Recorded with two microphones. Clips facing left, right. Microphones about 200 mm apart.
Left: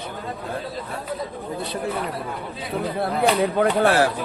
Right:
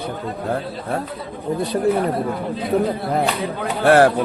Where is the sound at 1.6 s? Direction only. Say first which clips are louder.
Right 9 dB; 40° right (ahead or behind).